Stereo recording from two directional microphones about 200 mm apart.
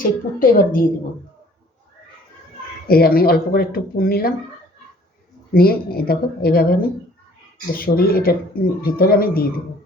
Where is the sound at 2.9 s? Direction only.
50° left (ahead or behind).